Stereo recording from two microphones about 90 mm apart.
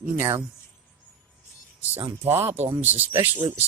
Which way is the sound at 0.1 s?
25° right (ahead or behind).